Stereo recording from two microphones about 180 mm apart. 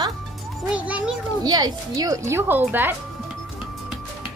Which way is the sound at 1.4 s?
20° right (ahead or behind).